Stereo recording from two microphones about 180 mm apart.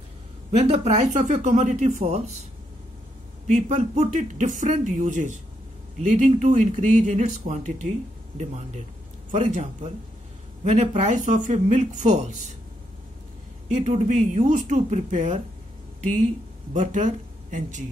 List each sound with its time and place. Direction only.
0.5 s speech: 35° right (ahead or behind)
3.4 s speech: 40° right (ahead or behind)
13.7 s speech: 40° right (ahead or behind)
16.7 s speech: 45° right (ahead or behind)